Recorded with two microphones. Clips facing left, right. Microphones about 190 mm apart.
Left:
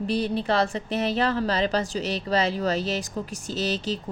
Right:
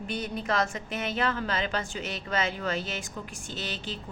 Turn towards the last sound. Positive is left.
turn(degrees=40)  # may be behind; listen again after turning